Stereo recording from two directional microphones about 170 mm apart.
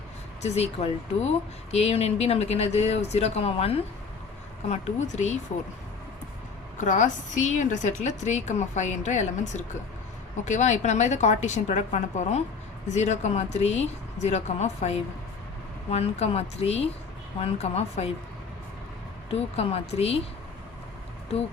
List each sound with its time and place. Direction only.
0.4 s a woman's voice: 40° left (ahead or behind)
6.7 s a woman's voice: 45° left (ahead or behind)
19.3 s speech: 35° left (ahead or behind)